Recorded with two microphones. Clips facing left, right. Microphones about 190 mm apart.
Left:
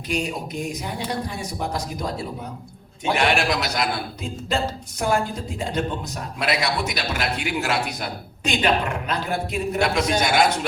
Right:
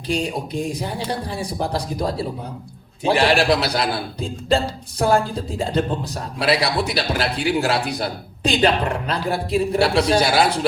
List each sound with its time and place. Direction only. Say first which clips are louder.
0.1 s a man's voice: right 3 dB; 30° right (ahead or behind)